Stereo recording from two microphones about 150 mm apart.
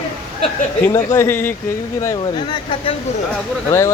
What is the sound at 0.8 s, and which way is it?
Speech, 20° left (ahead or behind).